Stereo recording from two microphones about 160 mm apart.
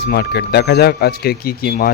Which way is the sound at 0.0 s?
80° left.